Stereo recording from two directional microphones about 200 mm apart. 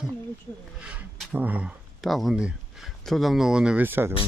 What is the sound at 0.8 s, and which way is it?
Speech, 5° right (ahead or behind).